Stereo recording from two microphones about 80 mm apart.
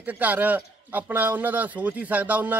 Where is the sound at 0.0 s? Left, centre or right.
Right.